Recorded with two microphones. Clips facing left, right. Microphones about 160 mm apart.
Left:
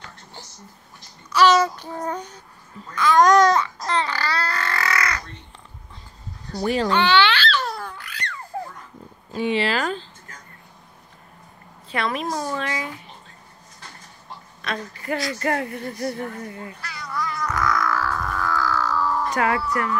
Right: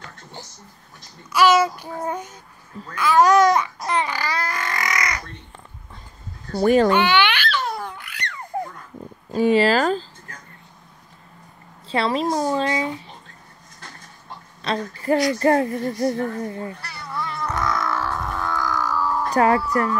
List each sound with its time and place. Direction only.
1.3 s child singing: 10° right (ahead or behind)
2.9 s babbling: 10° right (ahead or behind)
6.5 s speech: 50° right (ahead or behind)
6.9 s babbling: 10° right (ahead or behind)
9.3 s speech: 40° right (ahead or behind)
11.9 s speech: 30° right (ahead or behind)
14.6 s speech: 30° right (ahead or behind)
15.3 s cat: 35° right (ahead or behind); by 19.3 s 10° right (ahead or behind)
19.3 s speech: 35° right (ahead or behind)